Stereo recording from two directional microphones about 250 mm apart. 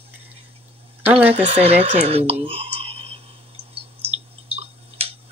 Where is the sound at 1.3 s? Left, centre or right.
Right.